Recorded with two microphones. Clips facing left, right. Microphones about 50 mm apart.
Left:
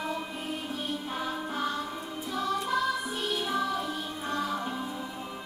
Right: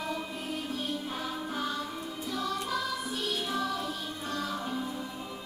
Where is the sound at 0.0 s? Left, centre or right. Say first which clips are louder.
Left 1 dB; centre.